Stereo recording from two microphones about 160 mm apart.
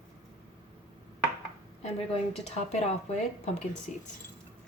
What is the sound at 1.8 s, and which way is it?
Speech, 40° left (ahead or behind).